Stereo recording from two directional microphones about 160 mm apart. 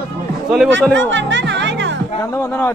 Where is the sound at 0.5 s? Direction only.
5° left (ahead or behind).